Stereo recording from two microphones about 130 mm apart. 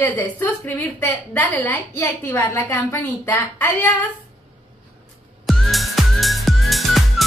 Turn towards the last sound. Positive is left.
turn(degrees=0)  # may be behind; listen again after turning